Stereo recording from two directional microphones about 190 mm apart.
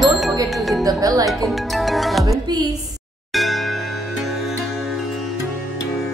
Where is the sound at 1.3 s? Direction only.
Centre (ahead or behind).